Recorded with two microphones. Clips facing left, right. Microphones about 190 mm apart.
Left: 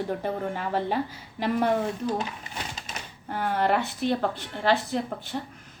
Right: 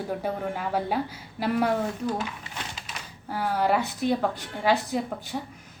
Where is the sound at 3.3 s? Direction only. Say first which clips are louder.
Even; 5° right (ahead or behind).